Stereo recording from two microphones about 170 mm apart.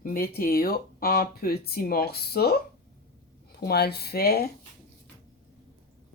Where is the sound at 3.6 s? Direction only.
70° left (ahead or behind).